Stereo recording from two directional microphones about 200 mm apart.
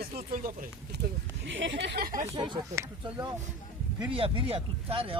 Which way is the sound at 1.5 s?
65° right (ahead or behind).